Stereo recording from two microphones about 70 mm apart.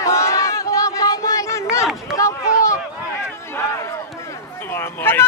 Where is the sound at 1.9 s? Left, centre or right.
Centre.